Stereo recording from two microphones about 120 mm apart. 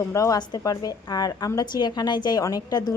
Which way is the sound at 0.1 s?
30° left (ahead or behind).